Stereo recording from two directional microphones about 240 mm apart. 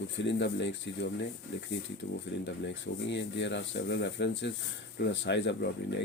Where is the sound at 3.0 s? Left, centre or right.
Left.